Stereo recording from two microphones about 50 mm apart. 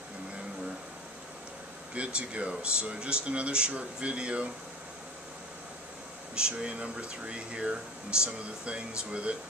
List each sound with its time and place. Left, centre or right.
2.0 s speech: right
6.3 s speech: centre